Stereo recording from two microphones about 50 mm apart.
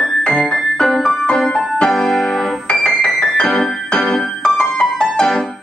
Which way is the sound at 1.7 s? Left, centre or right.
Centre.